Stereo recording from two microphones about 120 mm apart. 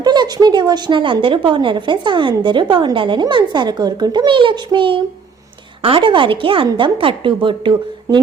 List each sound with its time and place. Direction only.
0.0 s a woman's voice: 35° right (ahead or behind)